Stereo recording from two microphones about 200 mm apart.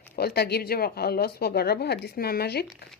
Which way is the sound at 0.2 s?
50° left (ahead or behind).